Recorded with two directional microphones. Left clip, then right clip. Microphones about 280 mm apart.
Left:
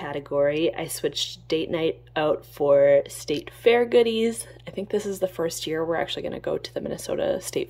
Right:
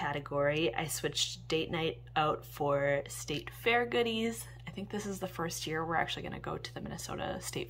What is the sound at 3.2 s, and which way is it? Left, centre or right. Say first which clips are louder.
Speech: left 12 dB; centre.